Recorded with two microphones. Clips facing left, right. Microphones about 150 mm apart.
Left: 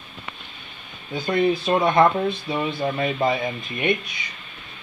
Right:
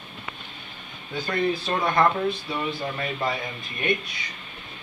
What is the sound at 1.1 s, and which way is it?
Speech, 15° left (ahead or behind).